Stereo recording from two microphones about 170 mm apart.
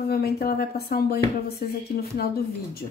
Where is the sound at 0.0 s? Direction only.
70° left (ahead or behind).